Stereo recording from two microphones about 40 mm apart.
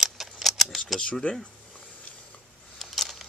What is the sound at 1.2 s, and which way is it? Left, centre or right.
Speech, left.